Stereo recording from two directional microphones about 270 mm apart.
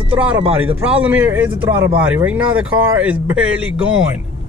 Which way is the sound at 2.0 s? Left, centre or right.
Centre.